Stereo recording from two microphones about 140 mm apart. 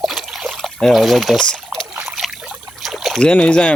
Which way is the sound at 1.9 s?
10° right (ahead or behind).